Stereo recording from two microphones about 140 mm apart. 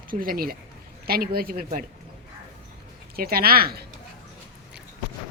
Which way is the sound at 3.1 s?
90° right.